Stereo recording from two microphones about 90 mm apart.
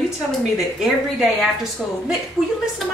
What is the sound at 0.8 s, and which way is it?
Speech, 5° right (ahead or behind).